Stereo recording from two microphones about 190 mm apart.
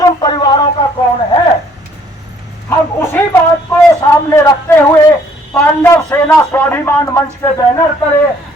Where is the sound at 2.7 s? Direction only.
10° left (ahead or behind).